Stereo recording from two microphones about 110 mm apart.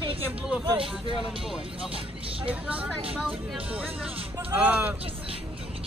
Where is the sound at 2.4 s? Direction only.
10° right (ahead or behind).